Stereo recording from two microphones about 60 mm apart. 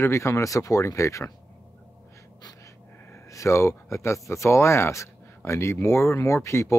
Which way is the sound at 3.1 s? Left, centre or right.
Left.